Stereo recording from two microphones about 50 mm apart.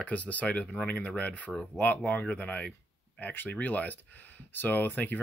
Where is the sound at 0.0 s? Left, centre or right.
Left.